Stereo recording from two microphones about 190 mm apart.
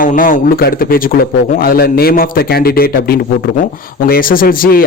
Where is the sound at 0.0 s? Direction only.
45° left (ahead or behind).